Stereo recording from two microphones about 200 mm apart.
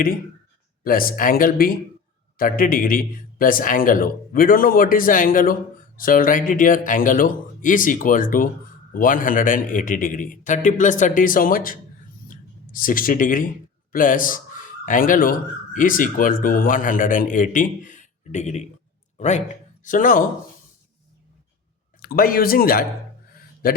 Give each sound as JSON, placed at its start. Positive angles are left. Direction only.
{"t": 0.9, "sound": "a man's voice", "side_deg": 45}
{"t": 12.3, "sound": "a sound", "side_deg": 45}
{"t": 13.9, "sound": "a man's voice", "side_deg": 45}
{"t": 22.0, "sound": "a man's voice", "side_deg": 45}